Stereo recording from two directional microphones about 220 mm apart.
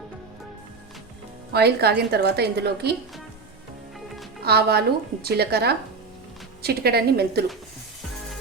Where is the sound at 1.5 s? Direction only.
45° right (ahead or behind).